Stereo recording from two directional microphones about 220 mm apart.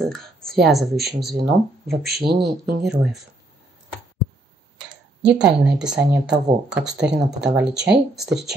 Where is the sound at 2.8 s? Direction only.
Centre (ahead or behind).